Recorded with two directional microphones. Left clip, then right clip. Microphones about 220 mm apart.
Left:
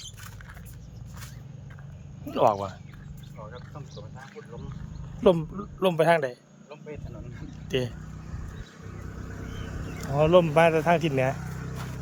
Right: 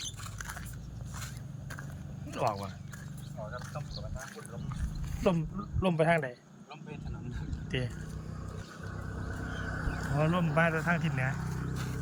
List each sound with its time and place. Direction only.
2.3 s speech: 25° left (ahead or behind)
5.2 s speech: 20° left (ahead or behind)
7.7 s speech: 20° left (ahead or behind)
9.1 s vehicle: 5° left (ahead or behind)
10.0 s speech: 30° left (ahead or behind)